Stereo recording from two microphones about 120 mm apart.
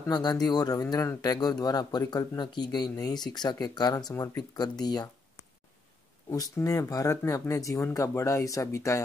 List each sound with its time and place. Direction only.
0.0 s speech: 35° left (ahead or behind)
6.3 s speech: 30° left (ahead or behind)